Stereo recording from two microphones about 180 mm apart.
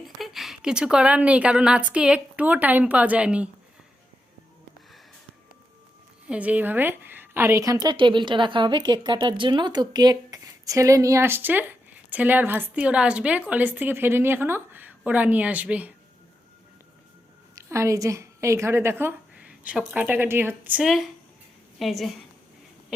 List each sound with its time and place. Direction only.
0.2 s a woman's voice: centre (ahead or behind)
6.2 s a woman's voice: 5° right (ahead or behind)
17.5 s a woman's voice: 15° right (ahead or behind); by 22.1 s centre (ahead or behind)